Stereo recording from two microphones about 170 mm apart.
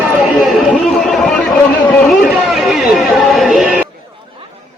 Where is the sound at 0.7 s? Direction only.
5° left (ahead or behind).